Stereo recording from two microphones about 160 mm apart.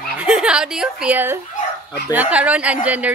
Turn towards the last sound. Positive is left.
turn(degrees=-10)  # may be behind; listen again after turning